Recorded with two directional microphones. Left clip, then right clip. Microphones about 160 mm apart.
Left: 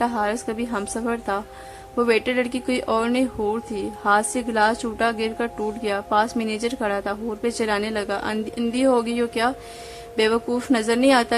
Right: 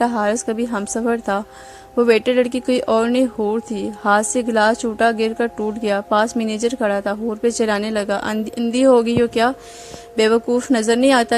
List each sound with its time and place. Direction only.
0.0 s a woman's voice: 30° right (ahead or behind)